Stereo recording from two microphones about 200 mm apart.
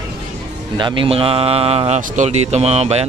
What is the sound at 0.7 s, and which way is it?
Speech, 25° right (ahead or behind).